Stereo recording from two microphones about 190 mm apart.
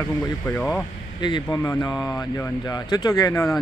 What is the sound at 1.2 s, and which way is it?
Speech, 20° left (ahead or behind).